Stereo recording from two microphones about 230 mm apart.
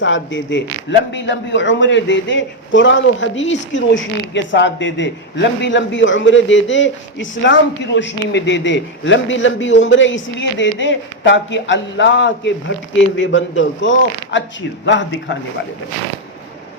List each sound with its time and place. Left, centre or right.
0.0 s speech: left